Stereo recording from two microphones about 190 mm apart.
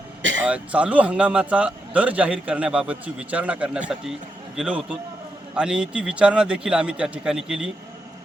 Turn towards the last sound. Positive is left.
turn(degrees=-5)  # may be behind; listen again after turning